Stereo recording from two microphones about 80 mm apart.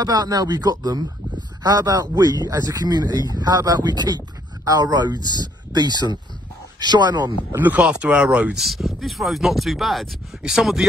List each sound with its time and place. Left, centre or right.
0.0 s speech: right
7.5 s speech: right
7.8 s speech: centre
8.5 s speech: centre